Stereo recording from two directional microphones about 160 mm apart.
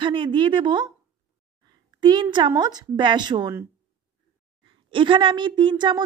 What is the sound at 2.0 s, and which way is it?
A woman's voice, 30° right (ahead or behind).